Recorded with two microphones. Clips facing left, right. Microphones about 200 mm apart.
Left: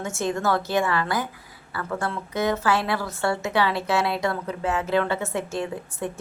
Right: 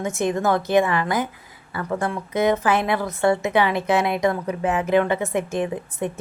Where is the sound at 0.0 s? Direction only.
15° right (ahead or behind).